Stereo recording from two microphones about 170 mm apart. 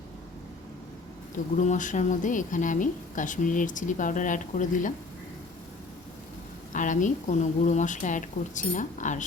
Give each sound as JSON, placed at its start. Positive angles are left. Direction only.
{"t": 1.5, "sound": "a woman's voice", "side_deg": 45}
{"t": 6.7, "sound": "a woman's voice", "side_deg": 50}